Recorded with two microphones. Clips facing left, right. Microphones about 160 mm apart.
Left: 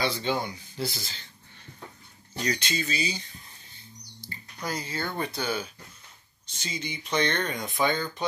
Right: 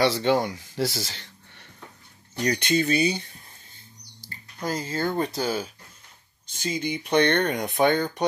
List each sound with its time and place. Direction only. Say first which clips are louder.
0.0 s speech: right 7 dB; 75° right (ahead or behind)
2.3 s speech: right 7 dB; 55° right (ahead or behind)
4.6 s speech: right 6 dB; 45° right (ahead or behind)
6.6 s speech: right 8 dB; 50° right (ahead or behind)